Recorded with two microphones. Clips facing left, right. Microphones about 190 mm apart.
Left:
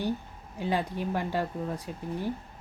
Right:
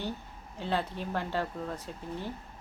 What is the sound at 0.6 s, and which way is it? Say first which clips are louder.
Speech: left 3 dB; 10° left (ahead or behind).